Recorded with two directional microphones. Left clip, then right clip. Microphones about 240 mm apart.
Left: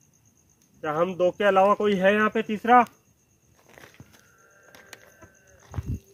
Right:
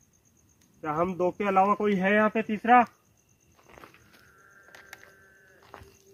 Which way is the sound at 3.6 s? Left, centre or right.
Centre.